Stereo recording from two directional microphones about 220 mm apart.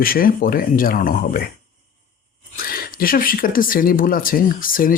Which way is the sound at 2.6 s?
40° left (ahead or behind).